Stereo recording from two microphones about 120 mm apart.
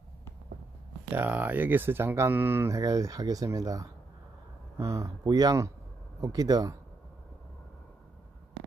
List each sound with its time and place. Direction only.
1.1 s speech: 15° right (ahead or behind); by 6.8 s 30° right (ahead or behind)